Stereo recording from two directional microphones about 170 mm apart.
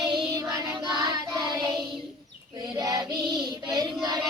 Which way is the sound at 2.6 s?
20° right (ahead or behind).